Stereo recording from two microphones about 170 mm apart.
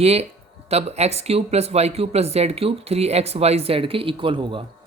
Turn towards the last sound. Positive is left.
turn(degrees=-30)  # may be behind; listen again after turning